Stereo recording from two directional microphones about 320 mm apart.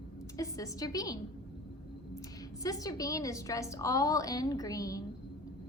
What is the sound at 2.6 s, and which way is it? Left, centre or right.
A woman's voice, centre.